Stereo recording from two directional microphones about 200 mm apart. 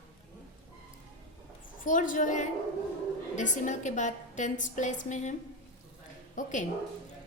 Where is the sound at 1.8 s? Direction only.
40° left (ahead or behind).